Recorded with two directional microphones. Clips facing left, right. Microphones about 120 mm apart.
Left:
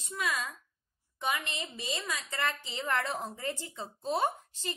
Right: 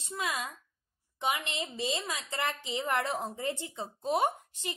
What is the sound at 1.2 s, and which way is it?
A woman's voice, 20° right (ahead or behind).